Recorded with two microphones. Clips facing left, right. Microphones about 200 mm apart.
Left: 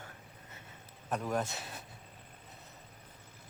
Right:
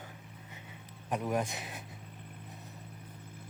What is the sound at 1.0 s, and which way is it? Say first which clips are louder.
Speech: right 2 dB; 15° right (ahead or behind).